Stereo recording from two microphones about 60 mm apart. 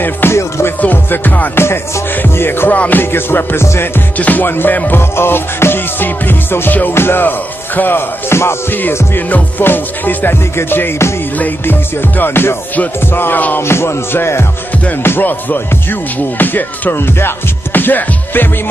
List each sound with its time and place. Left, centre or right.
0.0 s music: left
0.7 s music: left
4.2 s music: left
5.1 s music: left
8.3 s music: left
9.3 s music: left
11.3 s music: left
13.6 s music: left
15.0 s music: left